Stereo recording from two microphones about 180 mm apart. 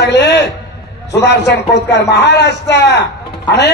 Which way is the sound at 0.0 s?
75° left (ahead or behind).